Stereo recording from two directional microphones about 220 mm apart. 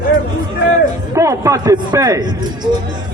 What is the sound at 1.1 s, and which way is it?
Speech, 15° right (ahead or behind).